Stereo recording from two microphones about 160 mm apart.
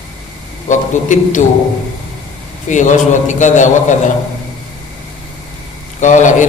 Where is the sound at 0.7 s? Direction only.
50° left (ahead or behind).